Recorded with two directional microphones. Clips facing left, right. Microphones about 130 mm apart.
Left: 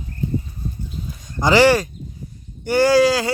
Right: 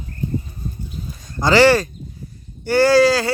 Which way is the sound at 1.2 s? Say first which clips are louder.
Right 1 dB; 15° left (ahead or behind).